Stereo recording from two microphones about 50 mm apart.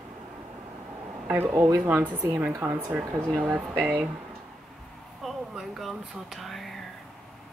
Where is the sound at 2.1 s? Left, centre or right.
Right.